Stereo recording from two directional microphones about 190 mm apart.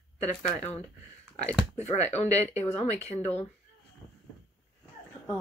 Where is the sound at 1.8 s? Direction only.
35° left (ahead or behind).